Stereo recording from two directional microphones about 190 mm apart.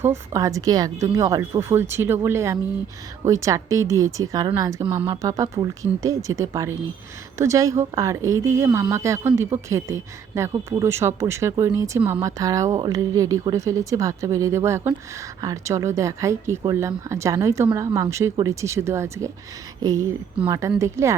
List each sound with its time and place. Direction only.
0.0 s speech: 15° right (ahead or behind)
20.5 s speech: 15° right (ahead or behind)